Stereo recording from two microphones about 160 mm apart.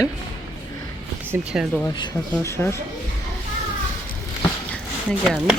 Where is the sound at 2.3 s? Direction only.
15° left (ahead or behind).